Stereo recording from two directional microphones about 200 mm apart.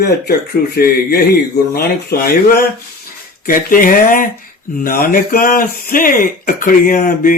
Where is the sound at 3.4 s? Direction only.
45° left (ahead or behind).